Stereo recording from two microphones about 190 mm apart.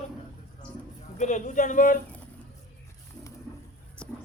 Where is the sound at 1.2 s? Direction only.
40° left (ahead or behind).